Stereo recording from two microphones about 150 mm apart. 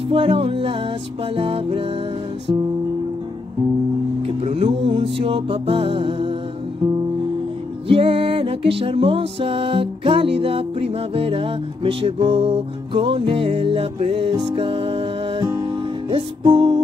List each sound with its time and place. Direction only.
0.1 s music: 35° right (ahead or behind)
4.2 s music: 40° right (ahead or behind)
7.9 s music: 40° right (ahead or behind)